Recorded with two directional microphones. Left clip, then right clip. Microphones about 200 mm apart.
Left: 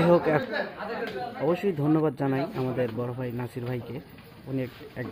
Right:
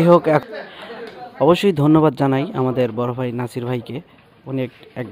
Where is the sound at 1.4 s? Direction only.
50° right (ahead or behind).